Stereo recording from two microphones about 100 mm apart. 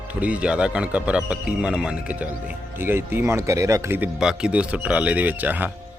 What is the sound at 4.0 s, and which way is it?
Speech, 10° right (ahead or behind).